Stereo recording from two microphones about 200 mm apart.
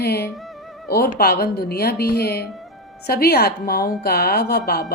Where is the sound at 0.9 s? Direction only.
50° left (ahead or behind).